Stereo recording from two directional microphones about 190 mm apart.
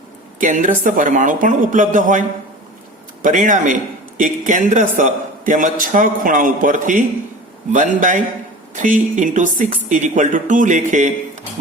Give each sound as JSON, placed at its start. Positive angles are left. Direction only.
{"t": 0.3, "sound": "a man's voice", "side_deg": -45}
{"t": 3.2, "sound": "a man's voice", "side_deg": -40}